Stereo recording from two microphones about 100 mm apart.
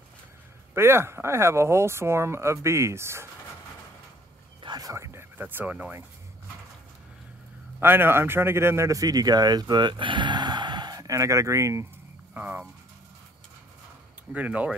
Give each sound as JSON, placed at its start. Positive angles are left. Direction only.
{"t": 0.7, "sound": "speech", "side_deg": -25}
{"t": 4.6, "sound": "a sound", "side_deg": -40}
{"t": 4.9, "sound": "speech", "side_deg": -25}
{"t": 7.8, "sound": "a man's voice", "side_deg": -20}
{"t": 12.4, "sound": "speech", "side_deg": -15}
{"t": 14.3, "sound": "speech", "side_deg": -15}